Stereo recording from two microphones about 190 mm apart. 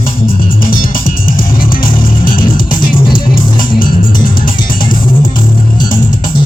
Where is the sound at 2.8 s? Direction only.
25° left (ahead or behind).